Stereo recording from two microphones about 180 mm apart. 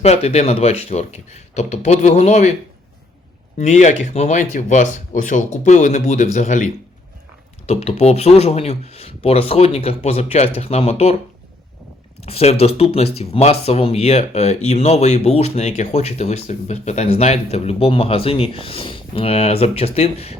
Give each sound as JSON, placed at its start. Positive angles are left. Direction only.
{"t": 0.0, "sound": "speech", "side_deg": 35}
{"t": 3.6, "sound": "speech", "side_deg": 40}
{"t": 7.7, "sound": "speech", "side_deg": 35}
{"t": 12.2, "sound": "speech", "side_deg": 35}